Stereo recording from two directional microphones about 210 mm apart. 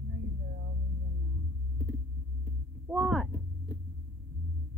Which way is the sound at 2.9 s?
Centre (ahead or behind).